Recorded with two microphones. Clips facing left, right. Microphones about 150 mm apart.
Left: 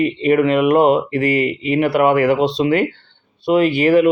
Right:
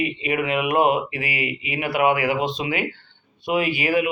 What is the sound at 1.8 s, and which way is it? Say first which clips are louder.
Speech: left 6 dB; 40° left (ahead or behind).